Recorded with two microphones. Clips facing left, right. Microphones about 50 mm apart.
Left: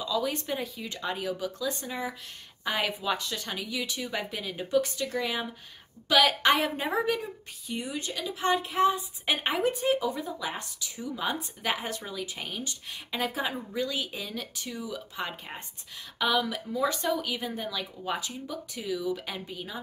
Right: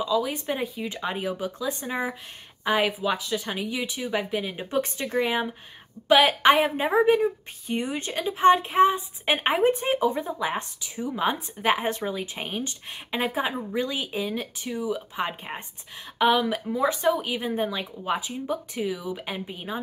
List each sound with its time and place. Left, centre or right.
0.0 s speech: centre
2.9 s speech: centre
3.5 s speech: right
7.6 s a woman's voice: right
13.6 s a woman's voice: right
13.8 s speech: right